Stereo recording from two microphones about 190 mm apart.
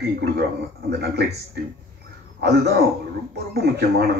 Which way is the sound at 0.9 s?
60° right (ahead or behind).